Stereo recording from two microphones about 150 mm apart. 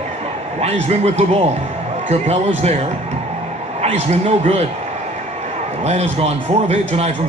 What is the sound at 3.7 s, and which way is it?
Speech, 50° right (ahead or behind).